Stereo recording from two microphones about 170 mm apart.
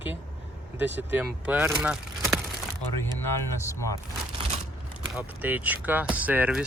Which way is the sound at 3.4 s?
15° left (ahead or behind).